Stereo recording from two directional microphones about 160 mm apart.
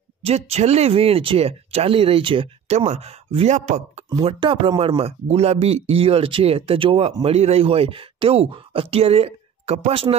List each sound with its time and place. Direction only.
0.2 s speech: 40° right (ahead or behind)
4.2 s speech: 35° right (ahead or behind)